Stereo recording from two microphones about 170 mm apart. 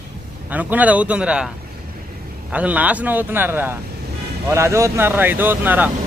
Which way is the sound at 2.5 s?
10° right (ahead or behind).